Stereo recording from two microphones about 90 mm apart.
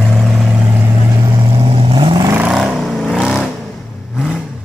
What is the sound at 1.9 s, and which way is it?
Vehicle, 70° right (ahead or behind).